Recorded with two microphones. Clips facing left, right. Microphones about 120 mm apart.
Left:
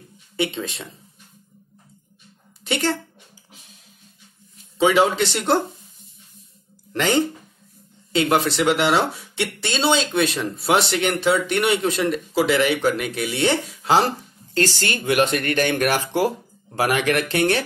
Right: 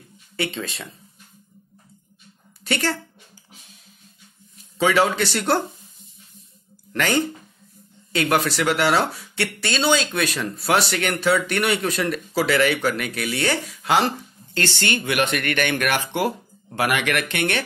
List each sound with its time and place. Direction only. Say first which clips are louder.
0.4 s speech: left 3 dB; 20° left (ahead or behind)
2.6 s a woman's voice: left 2 dB; 20° left (ahead or behind)
4.7 s speech: left 2 dB; 20° left (ahead or behind)
6.9 s speech: left 2 dB; 25° left (ahead or behind)